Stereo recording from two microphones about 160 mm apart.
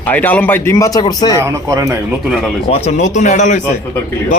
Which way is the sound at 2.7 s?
40° left (ahead or behind).